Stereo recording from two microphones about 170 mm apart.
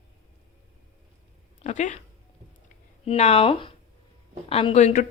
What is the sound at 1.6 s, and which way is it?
Speech, 45° left (ahead or behind).